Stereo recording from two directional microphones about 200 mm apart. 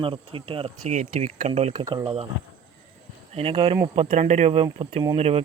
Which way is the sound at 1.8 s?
20° right (ahead or behind).